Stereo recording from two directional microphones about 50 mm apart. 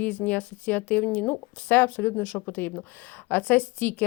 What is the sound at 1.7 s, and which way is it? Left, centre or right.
A woman's voice, left.